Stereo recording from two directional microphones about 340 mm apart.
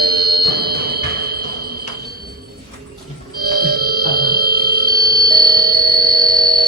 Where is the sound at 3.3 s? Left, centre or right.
Right.